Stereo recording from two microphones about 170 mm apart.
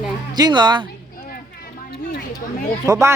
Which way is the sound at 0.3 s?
25° right (ahead or behind).